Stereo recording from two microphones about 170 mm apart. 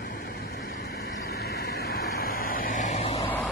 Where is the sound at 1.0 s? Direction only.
75° left (ahead or behind); by 3.3 s 35° left (ahead or behind).